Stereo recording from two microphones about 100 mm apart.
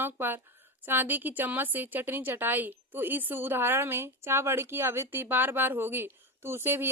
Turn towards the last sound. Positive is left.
turn(degrees=-25)  # may be behind; listen again after turning